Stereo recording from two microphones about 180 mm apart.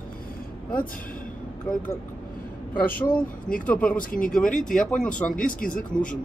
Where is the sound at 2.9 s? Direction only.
50° left (ahead or behind).